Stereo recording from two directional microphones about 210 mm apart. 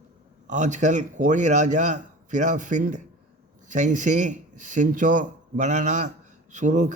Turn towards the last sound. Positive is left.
turn(degrees=-35)  # may be behind; listen again after turning